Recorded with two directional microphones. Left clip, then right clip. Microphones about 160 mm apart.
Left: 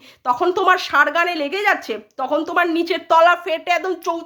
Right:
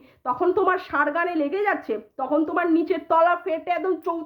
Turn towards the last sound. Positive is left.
turn(degrees=15)  # may be behind; listen again after turning